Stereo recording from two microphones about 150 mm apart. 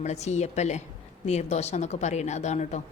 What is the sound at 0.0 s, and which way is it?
Speech, 50° left (ahead or behind).